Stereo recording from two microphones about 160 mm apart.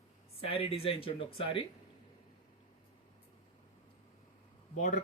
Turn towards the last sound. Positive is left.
turn(degrees=55)  # may be behind; listen again after turning